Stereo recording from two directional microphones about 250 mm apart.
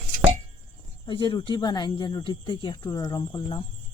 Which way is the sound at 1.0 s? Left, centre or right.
Centre.